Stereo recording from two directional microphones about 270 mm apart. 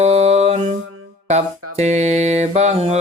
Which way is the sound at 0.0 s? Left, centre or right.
Right.